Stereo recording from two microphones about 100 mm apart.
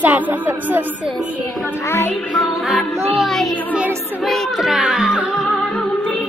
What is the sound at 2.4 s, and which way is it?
Music, centre (ahead or behind).